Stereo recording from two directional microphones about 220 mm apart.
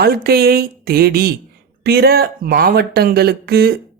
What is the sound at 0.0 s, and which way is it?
Speech, 45° right (ahead or behind).